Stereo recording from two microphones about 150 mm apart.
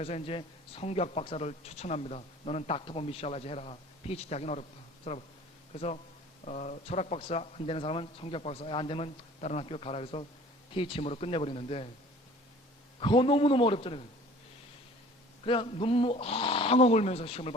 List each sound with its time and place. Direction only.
0.0 s a man's voice: 40° left (ahead or behind)
13.0 s speech: 35° left (ahead or behind)
15.4 s speech: 35° left (ahead or behind)